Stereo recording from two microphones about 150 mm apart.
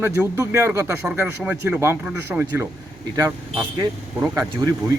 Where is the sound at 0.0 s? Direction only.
15° right (ahead or behind).